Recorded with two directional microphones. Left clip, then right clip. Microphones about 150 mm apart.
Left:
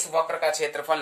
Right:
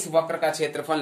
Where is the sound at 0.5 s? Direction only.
45° left (ahead or behind).